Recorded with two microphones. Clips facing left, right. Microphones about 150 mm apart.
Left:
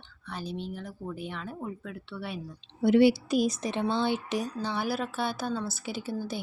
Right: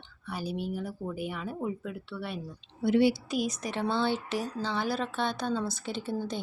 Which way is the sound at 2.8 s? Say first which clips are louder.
Left 3 dB; 70° left (ahead or behind).